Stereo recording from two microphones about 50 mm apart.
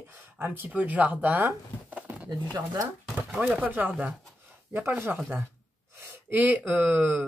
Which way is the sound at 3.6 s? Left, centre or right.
Right.